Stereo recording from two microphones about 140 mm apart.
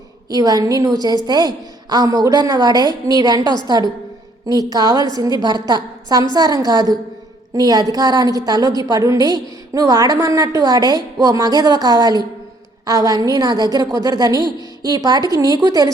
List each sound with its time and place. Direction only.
0.3 s a woman's voice: 25° right (ahead or behind)